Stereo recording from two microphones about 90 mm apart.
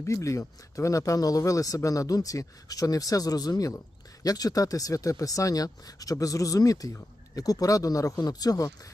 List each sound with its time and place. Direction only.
0.0 s speech: 35° left (ahead or behind)